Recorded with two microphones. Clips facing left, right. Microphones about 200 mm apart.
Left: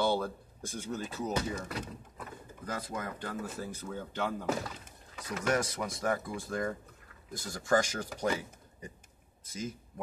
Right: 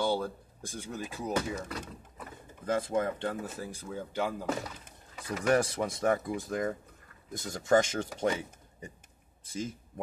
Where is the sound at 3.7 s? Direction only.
10° right (ahead or behind).